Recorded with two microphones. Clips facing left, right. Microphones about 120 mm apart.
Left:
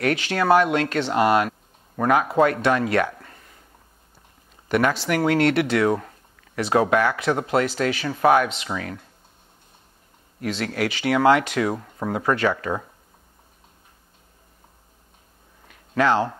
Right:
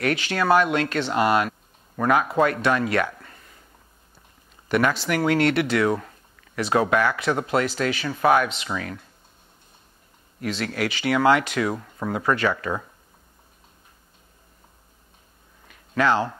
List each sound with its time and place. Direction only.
0.0 s speech: 50° left (ahead or behind)
2.0 s speech: 35° left (ahead or behind)
4.6 s speech: 50° left (ahead or behind)
5.9 s a sound: 35° left (ahead or behind)
6.6 s speech: 45° left (ahead or behind)
7.3 s speech: 35° left (ahead or behind)
7.7 s speech: 45° left (ahead or behind)
10.4 s speech: 45° left (ahead or behind)
11.7 s speech: 30° left (ahead or behind)
15.7 s a sound: 40° left (ahead or behind)